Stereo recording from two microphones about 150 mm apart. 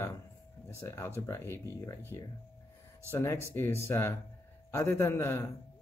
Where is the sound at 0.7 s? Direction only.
15° left (ahead or behind).